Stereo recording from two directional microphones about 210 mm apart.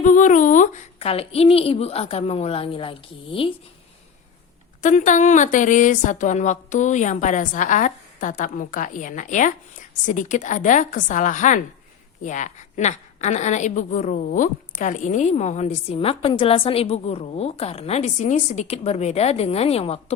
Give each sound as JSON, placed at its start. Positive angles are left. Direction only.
{"t": 0.0, "sound": "a woman's voice", "side_deg": 35}
{"t": 4.8, "sound": "a woman's voice", "side_deg": 35}